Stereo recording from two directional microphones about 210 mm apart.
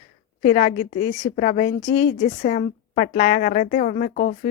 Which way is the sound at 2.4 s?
35° left (ahead or behind).